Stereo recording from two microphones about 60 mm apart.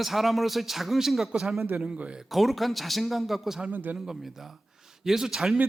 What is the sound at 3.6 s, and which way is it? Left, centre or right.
Speech, right.